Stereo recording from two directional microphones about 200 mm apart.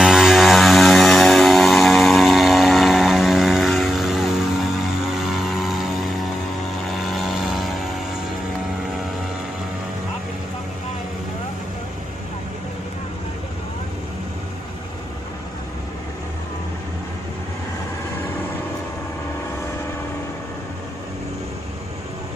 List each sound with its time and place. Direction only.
0.0 s vehicle: centre (ahead or behind)
6.9 s vehicle: centre (ahead or behind)